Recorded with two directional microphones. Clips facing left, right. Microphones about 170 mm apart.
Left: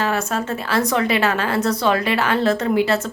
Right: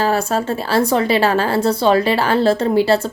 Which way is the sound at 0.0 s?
35° right (ahead or behind).